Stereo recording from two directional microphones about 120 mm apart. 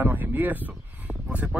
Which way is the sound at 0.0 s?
15° right (ahead or behind).